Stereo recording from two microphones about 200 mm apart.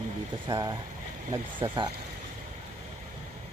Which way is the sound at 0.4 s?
20° right (ahead or behind).